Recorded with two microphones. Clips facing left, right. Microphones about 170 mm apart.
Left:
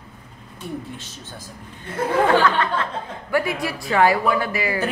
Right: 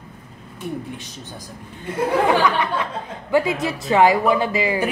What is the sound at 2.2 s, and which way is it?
Speech, 15° right (ahead or behind).